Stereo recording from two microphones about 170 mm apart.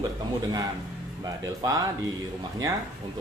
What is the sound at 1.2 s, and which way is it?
Speech, 20° right (ahead or behind).